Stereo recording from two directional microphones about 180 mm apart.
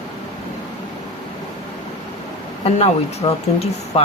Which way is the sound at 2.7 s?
35° left (ahead or behind).